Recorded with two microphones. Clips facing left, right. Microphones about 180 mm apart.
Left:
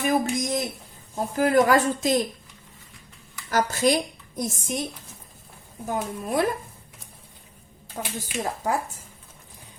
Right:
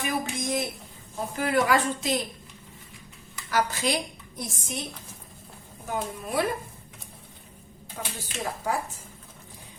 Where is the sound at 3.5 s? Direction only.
45° left (ahead or behind).